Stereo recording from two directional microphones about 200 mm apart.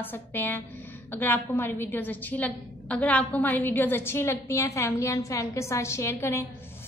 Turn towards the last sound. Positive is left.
turn(degrees=10)  # may be behind; listen again after turning